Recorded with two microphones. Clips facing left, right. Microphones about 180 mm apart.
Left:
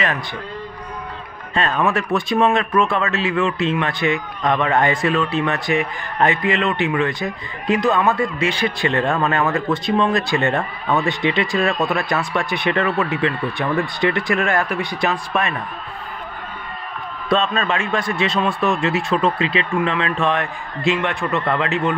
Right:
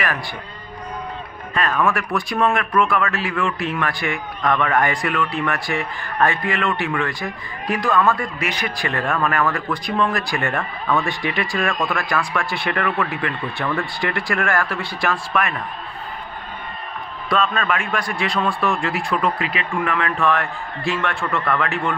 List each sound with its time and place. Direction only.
1.5 s speech: 25° left (ahead or behind)
17.3 s speech: 25° left (ahead or behind)